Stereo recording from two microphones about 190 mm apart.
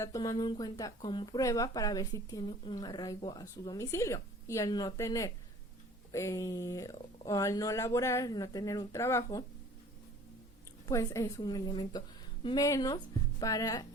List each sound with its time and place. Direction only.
0.0 s speech: 20° left (ahead or behind)
10.8 s speech: 15° left (ahead or behind)